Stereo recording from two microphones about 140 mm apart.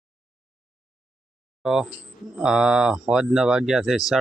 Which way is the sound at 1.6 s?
5° right (ahead or behind).